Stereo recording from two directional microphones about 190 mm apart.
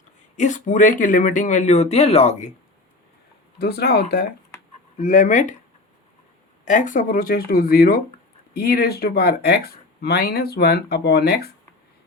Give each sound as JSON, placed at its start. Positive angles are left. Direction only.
{"t": 0.3, "sound": "speech", "side_deg": 40}
{"t": 3.6, "sound": "speech", "side_deg": 60}
{"t": 4.9, "sound": "speech", "side_deg": 40}
{"t": 6.7, "sound": "speech", "side_deg": 40}